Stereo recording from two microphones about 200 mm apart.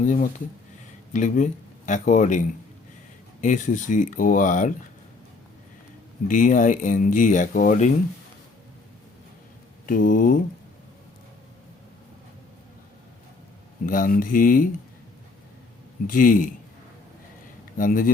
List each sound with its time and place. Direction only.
0.0 s speech: 40° left (ahead or behind)
3.4 s speech: 40° left (ahead or behind)
6.2 s speech: 40° left (ahead or behind)
9.8 s speech: 45° left (ahead or behind)
13.8 s speech: 45° left (ahead or behind)
16.0 s speech: 45° left (ahead or behind)
17.7 s speech: 45° left (ahead or behind)